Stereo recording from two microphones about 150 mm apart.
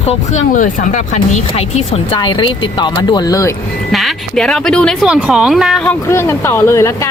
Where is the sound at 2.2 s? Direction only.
30° left (ahead or behind).